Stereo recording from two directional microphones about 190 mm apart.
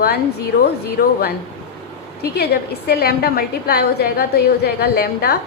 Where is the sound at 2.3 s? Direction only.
60° left (ahead or behind).